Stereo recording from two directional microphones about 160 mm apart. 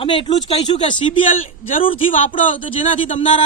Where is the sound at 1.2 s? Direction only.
55° left (ahead or behind).